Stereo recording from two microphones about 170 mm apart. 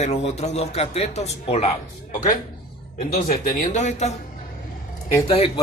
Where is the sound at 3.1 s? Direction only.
45° left (ahead or behind).